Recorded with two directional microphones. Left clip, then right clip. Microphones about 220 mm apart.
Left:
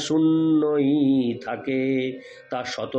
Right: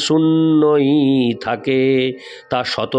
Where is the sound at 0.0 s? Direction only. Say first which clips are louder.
Right 6 dB; 45° right (ahead or behind).